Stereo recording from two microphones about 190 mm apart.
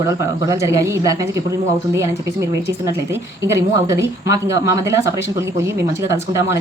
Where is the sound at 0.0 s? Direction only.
15° right (ahead or behind).